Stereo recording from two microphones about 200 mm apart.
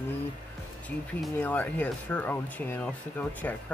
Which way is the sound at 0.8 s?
5° left (ahead or behind).